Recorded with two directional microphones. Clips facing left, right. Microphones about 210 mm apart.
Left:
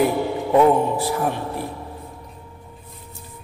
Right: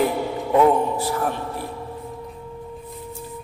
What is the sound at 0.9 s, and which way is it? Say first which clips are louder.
Speech: left 1 dB; 10° left (ahead or behind).